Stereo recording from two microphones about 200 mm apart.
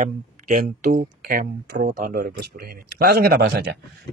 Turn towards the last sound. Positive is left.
turn(degrees=-55)  # may be behind; listen again after turning